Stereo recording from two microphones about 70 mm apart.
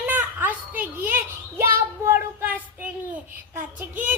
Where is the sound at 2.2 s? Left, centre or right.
Right.